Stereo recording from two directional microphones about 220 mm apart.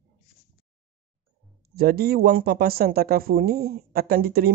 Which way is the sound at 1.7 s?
45° right (ahead or behind).